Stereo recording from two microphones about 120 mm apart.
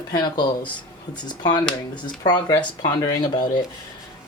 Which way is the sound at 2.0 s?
35° left (ahead or behind).